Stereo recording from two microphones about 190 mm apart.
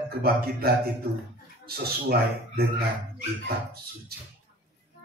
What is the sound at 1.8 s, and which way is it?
Speech, 55° right (ahead or behind).